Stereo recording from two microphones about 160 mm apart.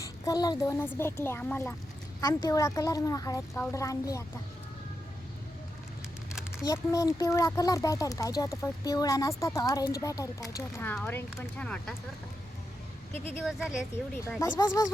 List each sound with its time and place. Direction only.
0.0 s speech: 20° left (ahead or behind)
2.2 s speech: 20° left (ahead or behind)
6.7 s speech: 20° left (ahead or behind)
13.4 s speech: 5° right (ahead or behind)
14.1 s speech: 10° left (ahead or behind)
14.4 s speech: 25° left (ahead or behind)